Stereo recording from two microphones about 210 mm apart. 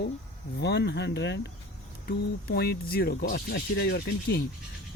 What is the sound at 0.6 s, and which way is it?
Speech, 50° left (ahead or behind).